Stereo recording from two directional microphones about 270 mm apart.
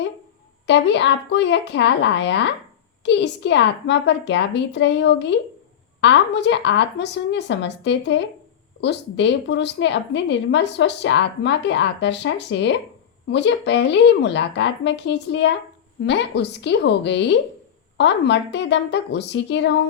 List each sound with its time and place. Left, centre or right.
0.7 s a woman's voice: left